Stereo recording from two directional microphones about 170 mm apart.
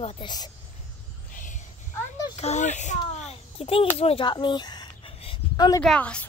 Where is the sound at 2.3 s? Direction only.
40° left (ahead or behind); by 5.8 s 25° left (ahead or behind).